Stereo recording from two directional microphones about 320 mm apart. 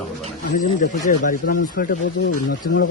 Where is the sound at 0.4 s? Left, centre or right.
Left.